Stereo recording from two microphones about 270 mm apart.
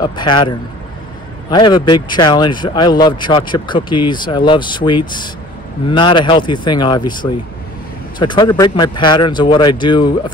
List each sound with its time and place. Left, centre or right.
0.0 s speech: centre